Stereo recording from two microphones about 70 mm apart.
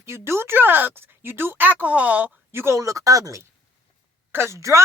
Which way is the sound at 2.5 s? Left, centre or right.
Right.